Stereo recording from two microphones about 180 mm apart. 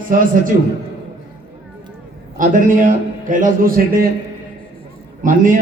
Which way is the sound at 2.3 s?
45° right (ahead or behind).